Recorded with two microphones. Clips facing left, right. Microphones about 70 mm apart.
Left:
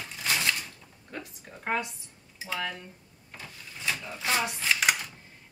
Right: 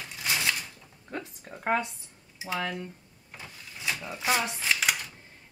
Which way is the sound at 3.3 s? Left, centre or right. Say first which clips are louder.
Even; centre.